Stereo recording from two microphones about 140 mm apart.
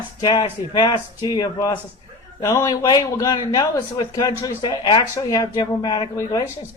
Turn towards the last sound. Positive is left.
turn(degrees=30)  # may be behind; listen again after turning